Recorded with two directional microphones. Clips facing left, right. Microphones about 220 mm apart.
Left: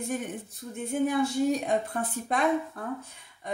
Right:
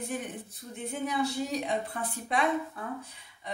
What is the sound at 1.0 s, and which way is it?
A woman's voice, 50° left (ahead or behind).